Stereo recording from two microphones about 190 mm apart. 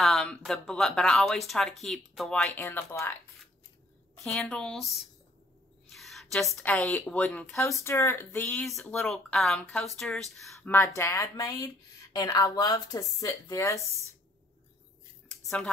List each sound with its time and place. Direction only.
0.0 s speech: centre (ahead or behind)
4.2 s speech: 5° left (ahead or behind)
8.5 s speech: centre (ahead or behind); by 13.8 s 15° left (ahead or behind)
15.2 s a sound: 5° left (ahead or behind)